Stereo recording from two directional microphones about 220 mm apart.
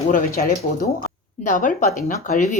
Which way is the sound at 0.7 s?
35° left (ahead or behind).